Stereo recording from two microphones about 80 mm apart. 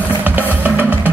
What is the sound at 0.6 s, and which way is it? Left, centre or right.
Music, right.